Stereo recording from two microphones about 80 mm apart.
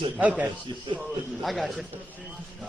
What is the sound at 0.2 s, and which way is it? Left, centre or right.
Speech, centre.